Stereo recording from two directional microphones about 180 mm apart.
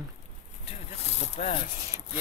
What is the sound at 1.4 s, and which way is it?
Speech, 35° left (ahead or behind).